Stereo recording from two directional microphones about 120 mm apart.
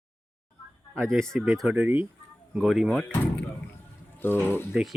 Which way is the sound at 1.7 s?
15° right (ahead or behind).